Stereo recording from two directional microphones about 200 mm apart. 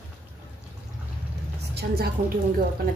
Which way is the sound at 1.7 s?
50° right (ahead or behind).